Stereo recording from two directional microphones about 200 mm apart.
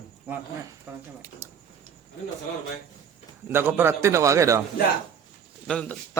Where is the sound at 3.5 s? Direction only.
10° right (ahead or behind).